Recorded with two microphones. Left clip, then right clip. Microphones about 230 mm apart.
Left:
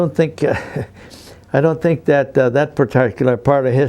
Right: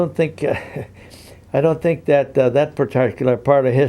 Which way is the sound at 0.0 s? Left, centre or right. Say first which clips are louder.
Left 3 dB; left.